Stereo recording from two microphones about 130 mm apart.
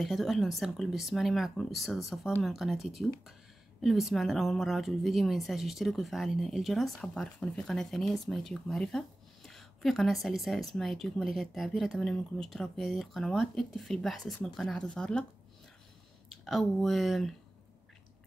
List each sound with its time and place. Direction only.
0.0 s a woman's voice: centre (ahead or behind)
16.4 s a woman's voice: centre (ahead or behind)